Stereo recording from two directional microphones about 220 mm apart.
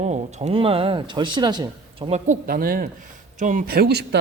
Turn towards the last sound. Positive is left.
turn(degrees=-50)  # may be behind; listen again after turning